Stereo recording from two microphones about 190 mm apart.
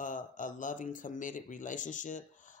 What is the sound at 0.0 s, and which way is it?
Speech, 45° left (ahead or behind).